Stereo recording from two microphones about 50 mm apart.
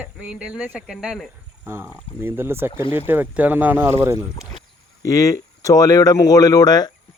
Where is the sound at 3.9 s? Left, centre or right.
Right.